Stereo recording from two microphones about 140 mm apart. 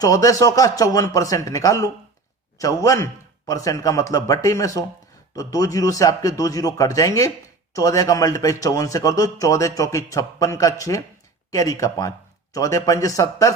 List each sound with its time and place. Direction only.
0.0 s a man's voice: 25° left (ahead or behind)